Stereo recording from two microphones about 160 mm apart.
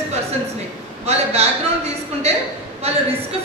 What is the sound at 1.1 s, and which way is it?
Speech, 40° right (ahead or behind).